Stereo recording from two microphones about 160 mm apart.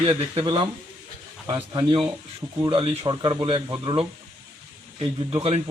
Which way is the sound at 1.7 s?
30° right (ahead or behind).